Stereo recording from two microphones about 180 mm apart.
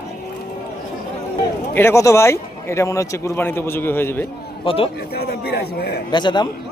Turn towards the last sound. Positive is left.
turn(degrees=25)  # may be behind; listen again after turning